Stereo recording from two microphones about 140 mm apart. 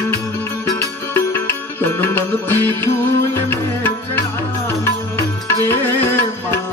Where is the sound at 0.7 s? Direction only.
20° left (ahead or behind).